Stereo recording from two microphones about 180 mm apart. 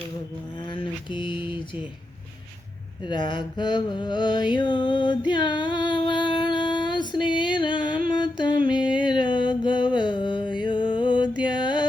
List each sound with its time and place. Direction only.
0.6 s mantra: 25° left (ahead or behind)
3.0 s mantra: 25° left (ahead or behind)
8.1 s music: 25° left (ahead or behind)